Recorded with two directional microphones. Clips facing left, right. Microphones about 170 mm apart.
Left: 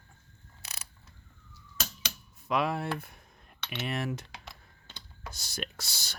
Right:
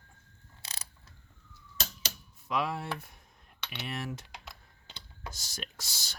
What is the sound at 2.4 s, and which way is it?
Speech, 60° left (ahead or behind).